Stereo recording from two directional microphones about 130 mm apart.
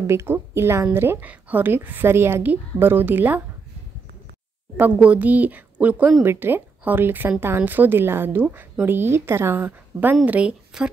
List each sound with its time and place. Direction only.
0.0 s a woman's voice: 20° right (ahead or behind)
4.7 s a woman's voice: 10° right (ahead or behind)